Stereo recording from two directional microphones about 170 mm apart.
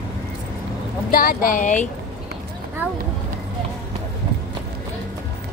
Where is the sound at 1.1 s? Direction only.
60° left (ahead or behind).